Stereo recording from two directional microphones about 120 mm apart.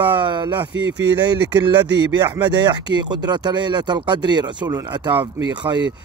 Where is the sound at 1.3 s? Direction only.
35° right (ahead or behind).